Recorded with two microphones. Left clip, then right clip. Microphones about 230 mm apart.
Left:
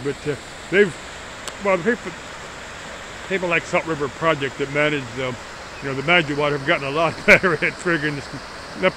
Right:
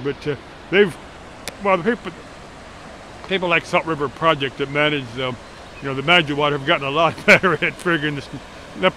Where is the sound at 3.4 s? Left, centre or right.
Centre.